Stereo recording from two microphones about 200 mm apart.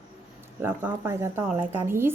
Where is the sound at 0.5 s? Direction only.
10° right (ahead or behind).